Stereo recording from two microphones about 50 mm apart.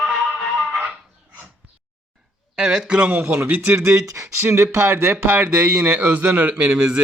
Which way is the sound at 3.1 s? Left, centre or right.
Right.